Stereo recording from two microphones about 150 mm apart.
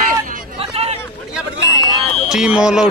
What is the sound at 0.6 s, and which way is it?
Chatter, 45° right (ahead or behind).